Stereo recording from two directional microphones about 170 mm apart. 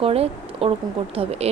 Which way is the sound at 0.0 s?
35° right (ahead or behind).